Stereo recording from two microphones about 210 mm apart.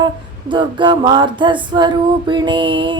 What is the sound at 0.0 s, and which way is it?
Female singing, 20° right (ahead or behind).